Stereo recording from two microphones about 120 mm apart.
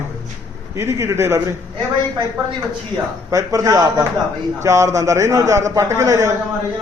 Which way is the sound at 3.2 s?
30° right (ahead or behind).